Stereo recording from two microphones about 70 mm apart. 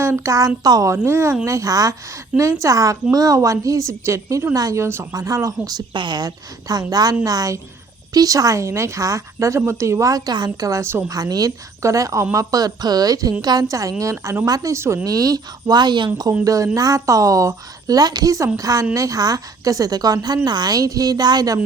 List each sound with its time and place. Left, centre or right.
0.0 s a woman's voice: right
1.0 s speech: right
1.5 s a woman's voice: right
4.5 s a woman's voice: right
4.8 s speech: right
5.1 s a woman's voice: right
10.7 s speech: right
11.1 s a woman's voice: right
14.4 s a woman's voice: right
15.0 s a woman's voice: right
16.4 s a woman's voice: right
18.5 s a woman's voice: right